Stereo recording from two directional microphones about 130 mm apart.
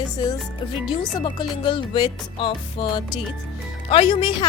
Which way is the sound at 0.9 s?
40° left (ahead or behind).